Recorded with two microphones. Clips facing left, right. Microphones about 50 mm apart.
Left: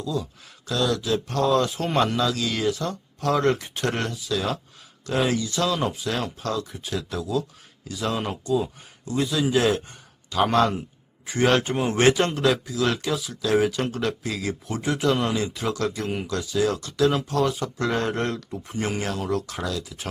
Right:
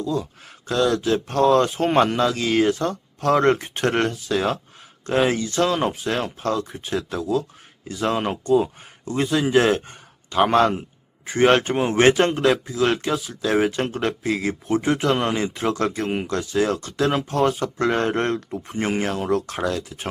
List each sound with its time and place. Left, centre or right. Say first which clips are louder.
0.0 s a man's voice: right 4 dB; right